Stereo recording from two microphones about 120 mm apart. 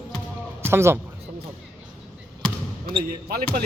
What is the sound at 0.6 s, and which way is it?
Speech, 20° right (ahead or behind).